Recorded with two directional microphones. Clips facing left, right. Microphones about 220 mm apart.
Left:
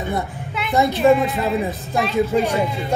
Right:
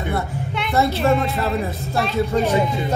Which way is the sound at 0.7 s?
15° left (ahead or behind).